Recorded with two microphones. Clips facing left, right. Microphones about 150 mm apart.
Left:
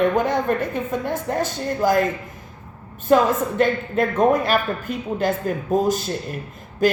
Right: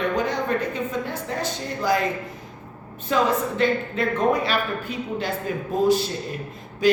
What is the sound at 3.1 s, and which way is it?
A woman's voice, 50° left (ahead or behind).